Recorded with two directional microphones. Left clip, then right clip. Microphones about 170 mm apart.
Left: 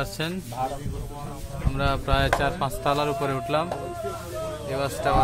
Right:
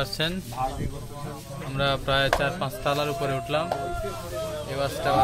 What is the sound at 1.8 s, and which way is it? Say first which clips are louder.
Speech: right 1 dB; 10° left (ahead or behind).